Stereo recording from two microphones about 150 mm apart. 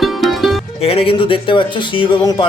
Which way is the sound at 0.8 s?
40° left (ahead or behind).